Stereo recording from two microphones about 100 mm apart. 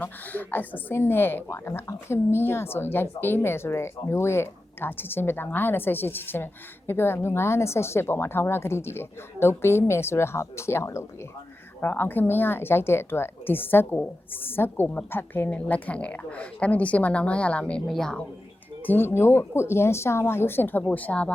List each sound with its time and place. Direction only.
0.0 s a woman's voice: 20° left (ahead or behind)
18.8 s a woman's voice: 20° left (ahead or behind)